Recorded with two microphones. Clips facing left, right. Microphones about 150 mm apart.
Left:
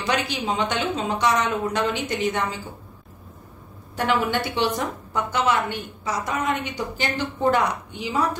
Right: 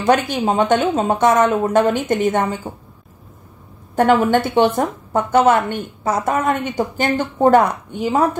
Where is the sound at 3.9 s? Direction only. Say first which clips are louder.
Right 9 dB; 45° right (ahead or behind).